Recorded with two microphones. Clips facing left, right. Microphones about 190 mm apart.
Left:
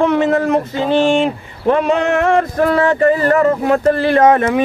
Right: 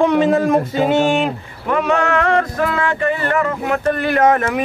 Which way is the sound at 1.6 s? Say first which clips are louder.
Left 3 dB; 30° left (ahead or behind).